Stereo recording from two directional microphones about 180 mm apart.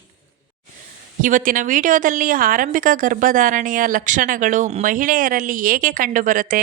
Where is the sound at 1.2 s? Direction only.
50° right (ahead or behind).